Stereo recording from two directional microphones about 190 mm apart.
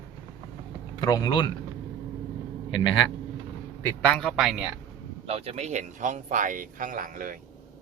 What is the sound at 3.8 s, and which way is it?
Speech, 5° left (ahead or behind).